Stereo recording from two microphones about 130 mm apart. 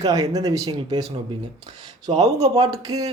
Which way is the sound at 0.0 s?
30° right (ahead or behind).